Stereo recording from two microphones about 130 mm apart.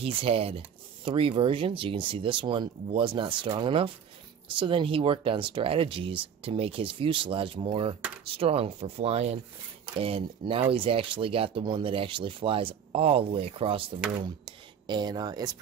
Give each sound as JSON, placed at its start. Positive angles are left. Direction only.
{"t": 0.0, "sound": "speech", "side_deg": -45}